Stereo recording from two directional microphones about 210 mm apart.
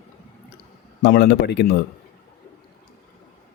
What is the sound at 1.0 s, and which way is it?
Speech, 50° left (ahead or behind).